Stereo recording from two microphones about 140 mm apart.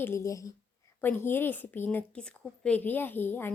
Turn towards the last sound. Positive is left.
turn(degrees=15)  # may be behind; listen again after turning